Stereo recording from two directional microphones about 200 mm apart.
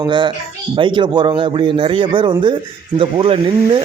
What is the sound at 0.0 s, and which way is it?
Speech, 25° right (ahead or behind).